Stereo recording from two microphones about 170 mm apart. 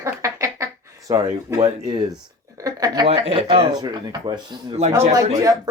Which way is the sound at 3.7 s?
25° right (ahead or behind).